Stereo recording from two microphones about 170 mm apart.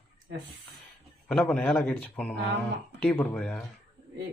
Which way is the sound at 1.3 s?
5° left (ahead or behind).